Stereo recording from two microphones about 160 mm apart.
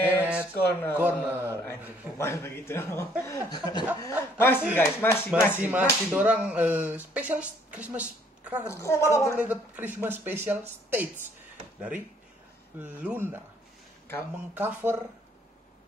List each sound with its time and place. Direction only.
0.0 s a sound: 10° right (ahead or behind)
0.6 s speech: 15° left (ahead or behind)
1.2 s speech: 15° right (ahead or behind)
1.5 s speech: 15° left (ahead or behind)
4.0 s speech: 15° left (ahead or behind)
5.6 s speech: 10° right (ahead or behind)
8.6 s speech: 15° left (ahead or behind)
9.4 s speech: 10° right (ahead or behind)
12.8 s speech: 10° right (ahead or behind)
14.5 s speech: 10° right (ahead or behind)